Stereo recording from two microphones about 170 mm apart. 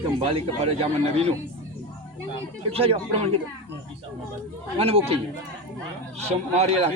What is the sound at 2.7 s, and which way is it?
Speech, 35° right (ahead or behind).